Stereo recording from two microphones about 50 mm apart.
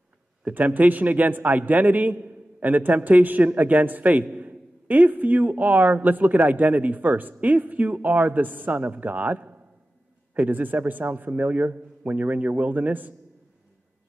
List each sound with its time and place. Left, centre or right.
0.5 s speech: right